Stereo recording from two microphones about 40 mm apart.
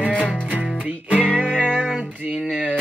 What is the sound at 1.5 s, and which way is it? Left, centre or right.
Music, centre.